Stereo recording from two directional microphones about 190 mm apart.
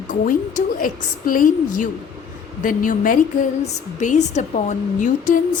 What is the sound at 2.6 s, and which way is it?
A woman's voice, 45° left (ahead or behind).